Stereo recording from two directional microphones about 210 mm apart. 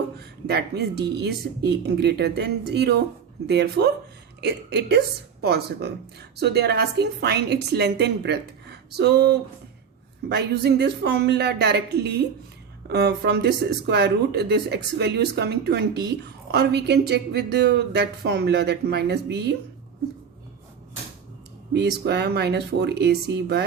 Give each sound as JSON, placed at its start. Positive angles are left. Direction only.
{"t": 0.2, "sound": "a sound", "side_deg": -50}
{"t": 1.2, "sound": "speech", "side_deg": -50}
{"t": 21.7, "sound": "speech", "side_deg": -55}